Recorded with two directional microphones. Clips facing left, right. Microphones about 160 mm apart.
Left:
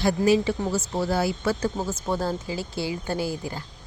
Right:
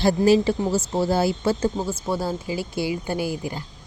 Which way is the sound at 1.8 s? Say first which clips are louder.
Right 1 dB; 10° right (ahead or behind).